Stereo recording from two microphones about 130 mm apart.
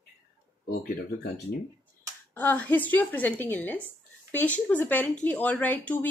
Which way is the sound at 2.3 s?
10° left (ahead or behind).